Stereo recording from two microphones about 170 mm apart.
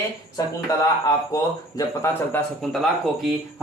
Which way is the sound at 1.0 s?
20° left (ahead or behind).